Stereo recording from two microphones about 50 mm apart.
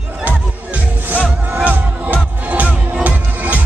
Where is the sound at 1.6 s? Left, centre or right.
Right.